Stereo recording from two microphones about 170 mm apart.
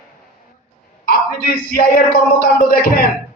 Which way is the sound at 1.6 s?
60° left (ahead or behind).